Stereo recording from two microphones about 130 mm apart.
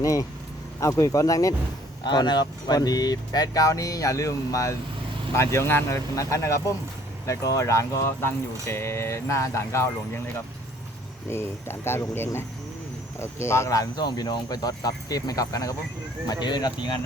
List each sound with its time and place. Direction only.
0.0 s speech: 25° left (ahead or behind)
11.3 s speech: 20° left (ahead or behind)